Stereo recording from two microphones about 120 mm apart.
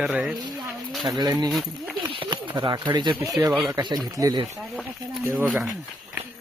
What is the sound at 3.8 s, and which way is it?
Speech, 35° right (ahead or behind).